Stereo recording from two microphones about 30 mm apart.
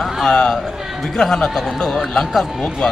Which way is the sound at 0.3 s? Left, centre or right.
Left.